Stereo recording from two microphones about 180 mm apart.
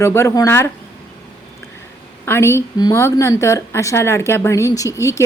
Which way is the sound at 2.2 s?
15° left (ahead or behind).